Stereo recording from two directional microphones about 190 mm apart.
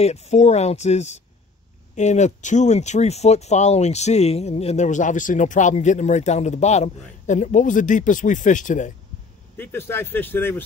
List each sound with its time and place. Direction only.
0.0 s speech: 35° left (ahead or behind)
9.6 s speech: 10° left (ahead or behind)